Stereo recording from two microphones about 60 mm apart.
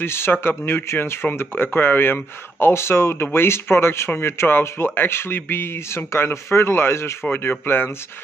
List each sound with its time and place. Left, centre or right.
0.0 s speech: left